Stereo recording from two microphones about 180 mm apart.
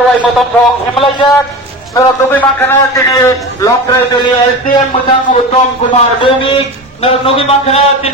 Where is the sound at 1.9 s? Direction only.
15° left (ahead or behind).